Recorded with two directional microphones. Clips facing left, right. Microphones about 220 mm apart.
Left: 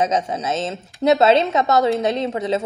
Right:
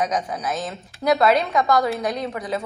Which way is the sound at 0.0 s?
25° left (ahead or behind).